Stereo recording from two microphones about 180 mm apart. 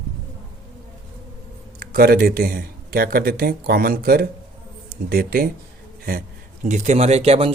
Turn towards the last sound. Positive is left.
turn(degrees=-35)  # may be behind; listen again after turning